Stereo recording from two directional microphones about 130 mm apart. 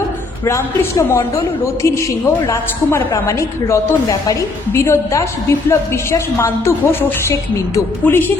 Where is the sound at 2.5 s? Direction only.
25° left (ahead or behind).